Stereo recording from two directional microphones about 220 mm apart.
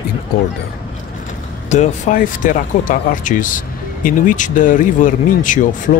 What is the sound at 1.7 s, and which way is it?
Speech, 35° left (ahead or behind).